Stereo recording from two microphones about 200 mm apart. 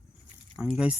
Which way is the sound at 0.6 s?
5° right (ahead or behind).